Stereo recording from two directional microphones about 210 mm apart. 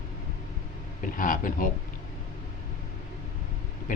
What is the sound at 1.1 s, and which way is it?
Speech, 40° left (ahead or behind).